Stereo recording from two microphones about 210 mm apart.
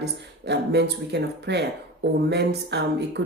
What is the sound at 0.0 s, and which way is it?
Speech, 50° right (ahead or behind).